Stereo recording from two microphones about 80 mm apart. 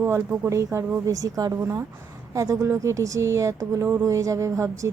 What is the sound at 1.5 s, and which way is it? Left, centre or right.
A woman's voice, right.